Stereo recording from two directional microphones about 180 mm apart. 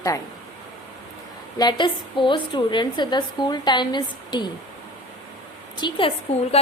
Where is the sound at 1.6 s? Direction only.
25° left (ahead or behind).